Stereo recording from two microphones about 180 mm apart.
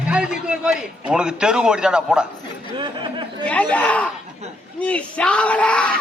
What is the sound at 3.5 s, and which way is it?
Speech, 10° left (ahead or behind).